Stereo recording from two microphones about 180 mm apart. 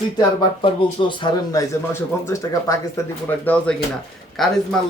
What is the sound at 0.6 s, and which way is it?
A man's voice, 25° left (ahead or behind).